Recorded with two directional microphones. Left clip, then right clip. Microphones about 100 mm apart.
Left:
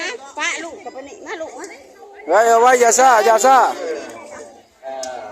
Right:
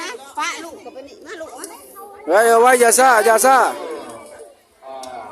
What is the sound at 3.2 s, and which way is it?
Speech, 55° right (ahead or behind).